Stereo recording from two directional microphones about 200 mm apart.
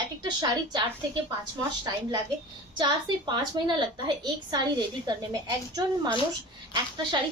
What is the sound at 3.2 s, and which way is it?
A woman's voice, 20° right (ahead or behind).